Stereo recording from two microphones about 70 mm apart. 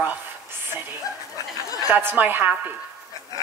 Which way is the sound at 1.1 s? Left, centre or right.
Left.